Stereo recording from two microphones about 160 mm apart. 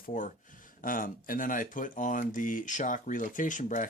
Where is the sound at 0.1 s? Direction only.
55° left (ahead or behind).